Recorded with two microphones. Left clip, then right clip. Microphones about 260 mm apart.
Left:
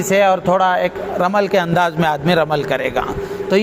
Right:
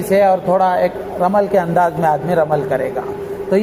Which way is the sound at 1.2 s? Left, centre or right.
Left.